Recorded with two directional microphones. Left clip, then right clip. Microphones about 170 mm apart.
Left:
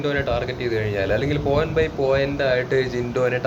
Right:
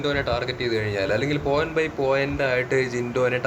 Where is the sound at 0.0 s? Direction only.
25° right (ahead or behind).